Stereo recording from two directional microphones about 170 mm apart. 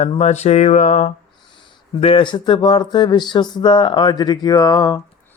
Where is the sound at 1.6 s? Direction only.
30° left (ahead or behind).